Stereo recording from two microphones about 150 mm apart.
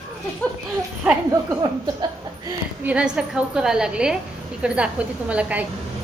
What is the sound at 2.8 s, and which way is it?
A woman's voice, 5° right (ahead or behind).